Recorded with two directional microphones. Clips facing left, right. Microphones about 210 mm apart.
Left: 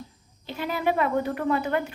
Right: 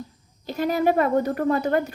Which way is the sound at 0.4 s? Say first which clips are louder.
Right 5 dB; 40° right (ahead or behind).